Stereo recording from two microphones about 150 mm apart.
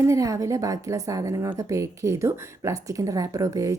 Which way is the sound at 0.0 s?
20° right (ahead or behind).